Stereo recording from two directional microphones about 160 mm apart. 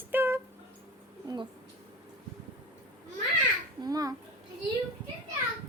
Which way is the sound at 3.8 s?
25° right (ahead or behind).